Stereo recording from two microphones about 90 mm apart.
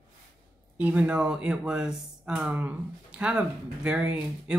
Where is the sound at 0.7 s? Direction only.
15° right (ahead or behind).